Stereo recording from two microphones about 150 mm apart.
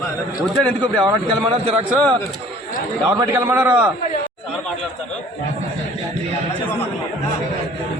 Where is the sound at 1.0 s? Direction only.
30° right (ahead or behind).